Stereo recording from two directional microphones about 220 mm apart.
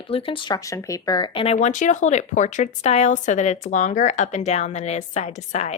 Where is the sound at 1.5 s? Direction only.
35° left (ahead or behind).